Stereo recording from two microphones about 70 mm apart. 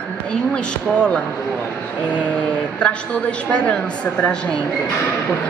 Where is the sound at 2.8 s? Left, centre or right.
Centre.